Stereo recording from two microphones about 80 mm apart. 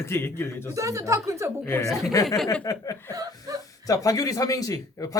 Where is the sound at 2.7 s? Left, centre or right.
Left.